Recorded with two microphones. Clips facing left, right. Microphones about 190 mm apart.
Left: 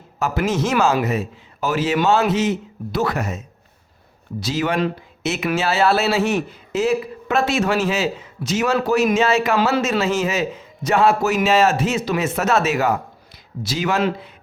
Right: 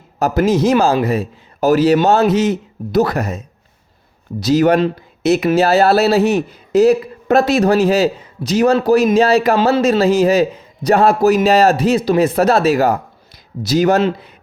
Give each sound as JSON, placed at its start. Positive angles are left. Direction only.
{"t": 0.2, "sound": "a man's voice", "side_deg": -40}